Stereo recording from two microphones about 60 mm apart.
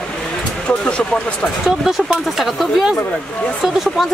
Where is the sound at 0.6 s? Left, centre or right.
Centre.